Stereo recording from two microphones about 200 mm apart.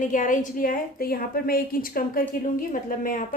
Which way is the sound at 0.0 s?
40° left (ahead or behind).